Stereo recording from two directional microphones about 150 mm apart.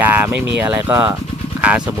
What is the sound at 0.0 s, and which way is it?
Speech, 10° right (ahead or behind).